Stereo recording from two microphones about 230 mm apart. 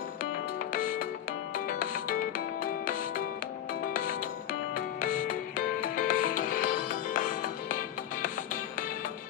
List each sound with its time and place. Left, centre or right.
0.7 s music: left